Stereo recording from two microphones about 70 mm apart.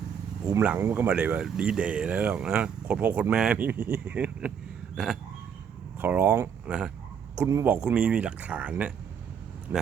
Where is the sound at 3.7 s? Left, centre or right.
Right.